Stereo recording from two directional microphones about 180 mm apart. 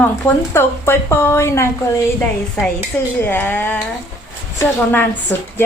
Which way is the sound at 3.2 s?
10° left (ahead or behind).